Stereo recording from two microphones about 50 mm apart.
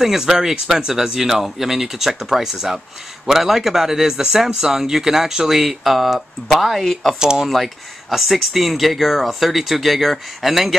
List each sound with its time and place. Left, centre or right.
0.0 s speech: centre
7.2 s speech: centre
7.4 s speech: centre